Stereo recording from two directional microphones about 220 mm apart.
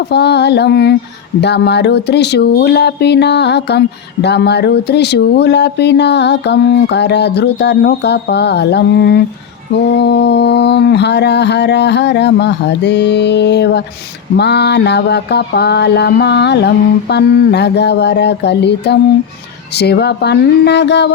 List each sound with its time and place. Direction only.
0.1 s speech: 50° left (ahead or behind)